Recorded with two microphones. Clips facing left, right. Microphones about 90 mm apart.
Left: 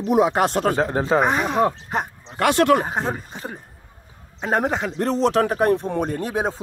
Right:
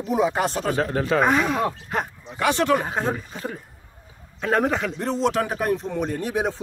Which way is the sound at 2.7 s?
25° left (ahead or behind).